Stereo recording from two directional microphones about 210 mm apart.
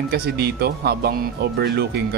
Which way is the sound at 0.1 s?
45° right (ahead or behind).